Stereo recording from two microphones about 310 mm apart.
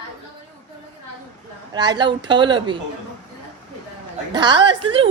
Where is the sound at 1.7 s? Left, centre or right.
Centre.